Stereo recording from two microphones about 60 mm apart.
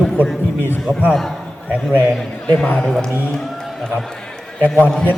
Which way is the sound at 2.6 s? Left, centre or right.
Left.